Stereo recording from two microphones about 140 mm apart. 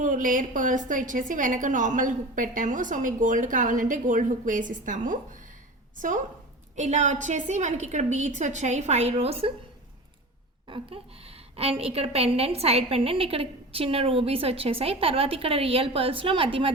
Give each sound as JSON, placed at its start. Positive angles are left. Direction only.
{"t": 0.0, "sound": "a woman's voice", "side_deg": -70}
{"t": 10.7, "sound": "a woman's voice", "side_deg": -45}